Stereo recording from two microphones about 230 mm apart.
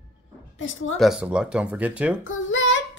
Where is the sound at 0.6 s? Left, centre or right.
Left.